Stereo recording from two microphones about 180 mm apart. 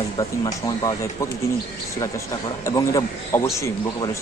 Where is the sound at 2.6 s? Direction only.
20° left (ahead or behind).